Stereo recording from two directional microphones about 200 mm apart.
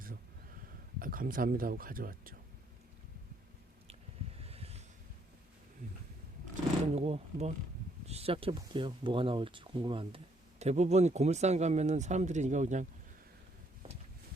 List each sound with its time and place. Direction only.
0.9 s speech: 45° right (ahead or behind)
4.4 s a sound: 30° right (ahead or behind)
6.9 s speech: 30° right (ahead or behind)